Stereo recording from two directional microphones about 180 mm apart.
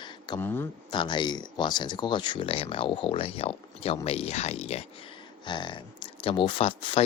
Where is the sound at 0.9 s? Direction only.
25° left (ahead or behind).